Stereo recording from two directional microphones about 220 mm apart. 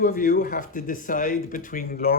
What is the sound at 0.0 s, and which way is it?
Speech, 35° left (ahead or behind).